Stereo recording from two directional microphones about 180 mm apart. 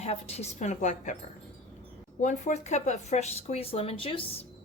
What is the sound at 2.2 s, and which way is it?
A woman's voice, 45° left (ahead or behind).